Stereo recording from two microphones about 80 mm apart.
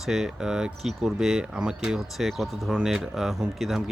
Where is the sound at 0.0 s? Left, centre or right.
Centre.